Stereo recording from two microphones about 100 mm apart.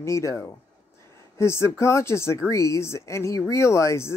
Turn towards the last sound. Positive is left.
turn(degrees=30)  # may be behind; listen again after turning